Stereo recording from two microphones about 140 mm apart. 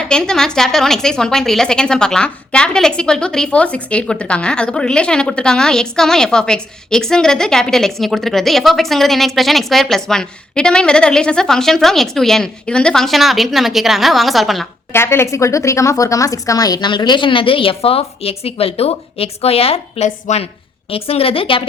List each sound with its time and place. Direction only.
0.1 s a woman's voice: 5° left (ahead or behind)
14.9 s a woman's voice: 20° left (ahead or behind); by 20.5 s 55° left (ahead or behind)
20.9 s a woman's voice: 40° left (ahead or behind)